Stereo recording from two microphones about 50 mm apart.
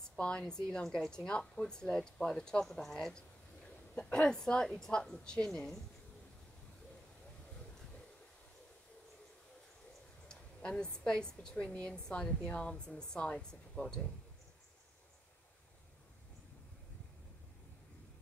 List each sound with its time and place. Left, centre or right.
0.1 s a woman's voice: centre
10.2 s a woman's voice: centre